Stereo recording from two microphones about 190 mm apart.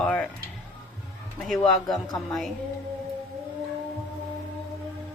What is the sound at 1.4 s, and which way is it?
Speech, centre (ahead or behind).